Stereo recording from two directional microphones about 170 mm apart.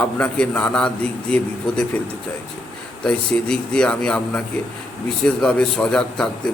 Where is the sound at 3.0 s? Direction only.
5° left (ahead or behind).